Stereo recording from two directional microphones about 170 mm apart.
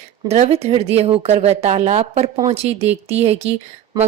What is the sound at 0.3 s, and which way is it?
A woman's voice, 40° right (ahead or behind).